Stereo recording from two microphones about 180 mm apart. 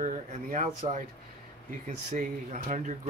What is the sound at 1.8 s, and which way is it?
Speech, 45° right (ahead or behind).